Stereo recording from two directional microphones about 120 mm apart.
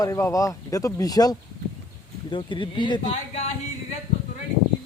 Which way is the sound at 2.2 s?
45° left (ahead or behind).